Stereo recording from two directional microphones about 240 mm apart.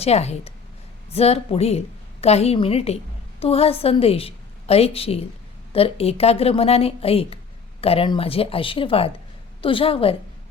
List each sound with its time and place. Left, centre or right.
0.0 s a woman's voice: left